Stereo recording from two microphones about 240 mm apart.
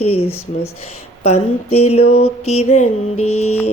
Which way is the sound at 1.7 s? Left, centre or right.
Left.